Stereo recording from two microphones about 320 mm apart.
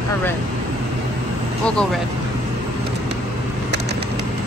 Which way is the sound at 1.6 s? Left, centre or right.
Centre.